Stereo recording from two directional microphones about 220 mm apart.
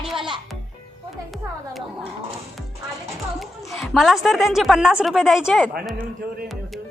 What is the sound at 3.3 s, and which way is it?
A woman's voice, centre (ahead or behind).